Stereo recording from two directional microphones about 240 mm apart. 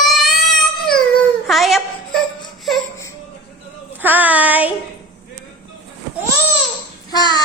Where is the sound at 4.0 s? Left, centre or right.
Centre.